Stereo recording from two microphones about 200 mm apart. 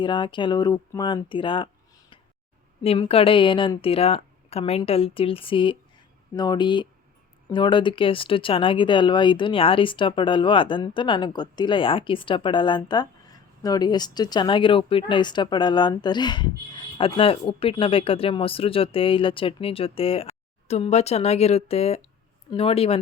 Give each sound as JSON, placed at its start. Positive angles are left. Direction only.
{"t": 0.0, "sound": "speech", "side_deg": 25}